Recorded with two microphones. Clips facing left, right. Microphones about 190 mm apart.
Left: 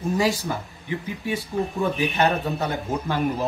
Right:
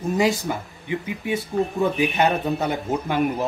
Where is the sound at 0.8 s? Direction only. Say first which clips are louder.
Right 2 dB; 20° right (ahead or behind).